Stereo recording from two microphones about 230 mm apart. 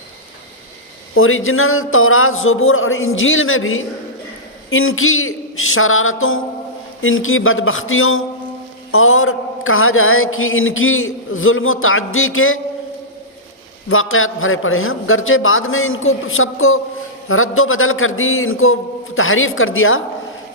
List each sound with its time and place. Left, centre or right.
1.1 s mantra: left
13.8 s mantra: left